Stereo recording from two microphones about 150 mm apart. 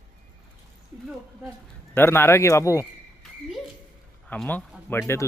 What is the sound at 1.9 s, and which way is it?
Speech, 15° left (ahead or behind).